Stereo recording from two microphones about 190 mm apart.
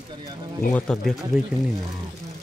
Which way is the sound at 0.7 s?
5° left (ahead or behind).